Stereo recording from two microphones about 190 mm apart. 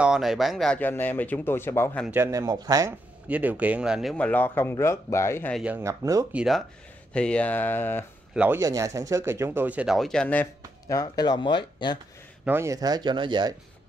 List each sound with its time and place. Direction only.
0.0 s speech: centre (ahead or behind)
2.0 s speech: 15° right (ahead or behind)
3.3 s speech: 10° right (ahead or behind); by 5.6 s 10° left (ahead or behind)
5.6 s speech: 10° right (ahead or behind)
6.3 s speech: centre (ahead or behind)
8.4 s speech: 15° right (ahead or behind); by 12.0 s 25° left (ahead or behind)
12.4 s speech: 15° right (ahead or behind)